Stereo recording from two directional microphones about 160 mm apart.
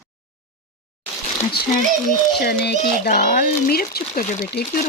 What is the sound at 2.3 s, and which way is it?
Speech, 85° left.